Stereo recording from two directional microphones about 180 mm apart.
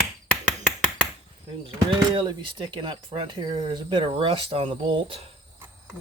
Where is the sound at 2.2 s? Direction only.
25° right (ahead or behind).